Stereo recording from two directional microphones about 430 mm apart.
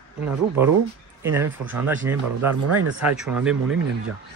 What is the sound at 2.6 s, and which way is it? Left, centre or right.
Speech, right.